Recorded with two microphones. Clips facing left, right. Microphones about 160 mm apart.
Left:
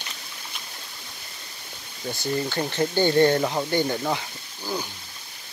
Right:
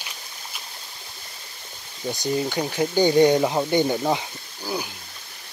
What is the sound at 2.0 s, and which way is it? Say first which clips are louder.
Speech: right 2 dB; 15° right (ahead or behind).